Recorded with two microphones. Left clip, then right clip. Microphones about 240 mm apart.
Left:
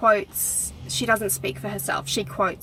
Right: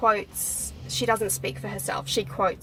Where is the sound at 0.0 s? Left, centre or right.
Centre.